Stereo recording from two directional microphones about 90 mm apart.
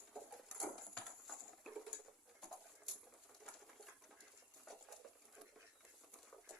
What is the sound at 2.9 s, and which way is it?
Bird, centre (ahead or behind).